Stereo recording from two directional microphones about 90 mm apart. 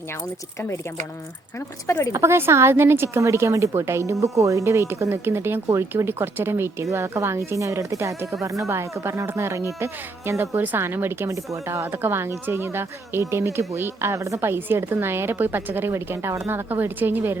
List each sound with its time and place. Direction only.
1.5 s speech: 30° left (ahead or behind)
2.1 s speech: 30° right (ahead or behind)